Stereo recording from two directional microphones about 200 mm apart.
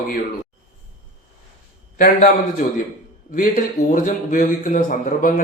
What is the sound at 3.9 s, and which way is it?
A man's voice, 40° left (ahead or behind).